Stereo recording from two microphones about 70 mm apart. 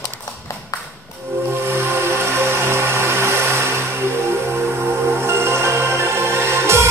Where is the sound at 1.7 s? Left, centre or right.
Right.